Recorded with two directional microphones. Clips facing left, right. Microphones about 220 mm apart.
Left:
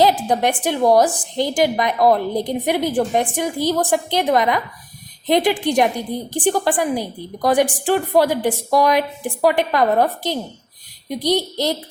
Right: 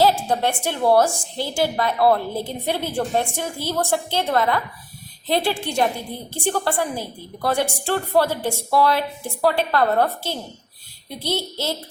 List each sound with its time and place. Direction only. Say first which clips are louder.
0.3 s a woman's voice: left 4 dB; 15° left (ahead or behind)